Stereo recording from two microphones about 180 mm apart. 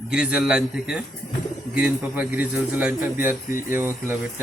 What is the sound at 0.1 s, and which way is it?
A man's voice, 5° right (ahead or behind).